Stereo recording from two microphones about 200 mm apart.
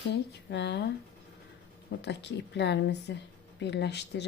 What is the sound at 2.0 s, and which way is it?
Speech, 60° left (ahead or behind).